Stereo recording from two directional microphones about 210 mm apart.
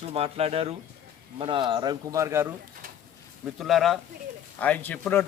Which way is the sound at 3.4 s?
Centre (ahead or behind).